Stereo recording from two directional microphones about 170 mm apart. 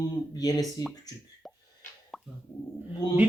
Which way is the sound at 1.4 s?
Centre (ahead or behind).